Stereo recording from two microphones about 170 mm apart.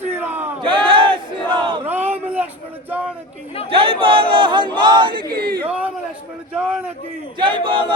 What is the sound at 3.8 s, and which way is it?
Speech, 30° right (ahead or behind).